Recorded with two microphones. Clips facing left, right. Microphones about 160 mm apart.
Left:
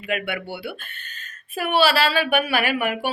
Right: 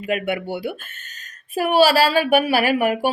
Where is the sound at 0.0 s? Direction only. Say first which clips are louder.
Right 4 dB; 40° right (ahead or behind).